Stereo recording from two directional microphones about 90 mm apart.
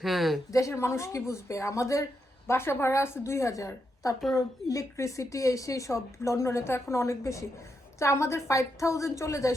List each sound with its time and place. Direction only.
0.0 s speech: centre (ahead or behind)
0.5 s a woman's voice: 35° left (ahead or behind)